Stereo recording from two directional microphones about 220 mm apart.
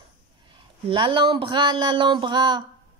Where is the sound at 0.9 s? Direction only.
25° right (ahead or behind).